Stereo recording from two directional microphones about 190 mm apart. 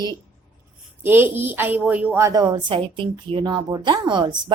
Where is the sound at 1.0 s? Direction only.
10° right (ahead or behind).